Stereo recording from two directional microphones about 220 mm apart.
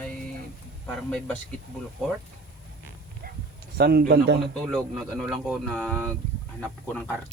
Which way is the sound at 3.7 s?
45° right (ahead or behind).